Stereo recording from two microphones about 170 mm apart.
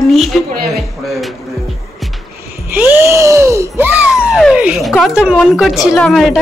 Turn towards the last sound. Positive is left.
turn(degrees=0)  # may be behind; listen again after turning